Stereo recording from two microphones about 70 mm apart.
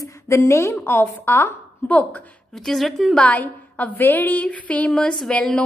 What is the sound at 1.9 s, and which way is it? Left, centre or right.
Speech, left.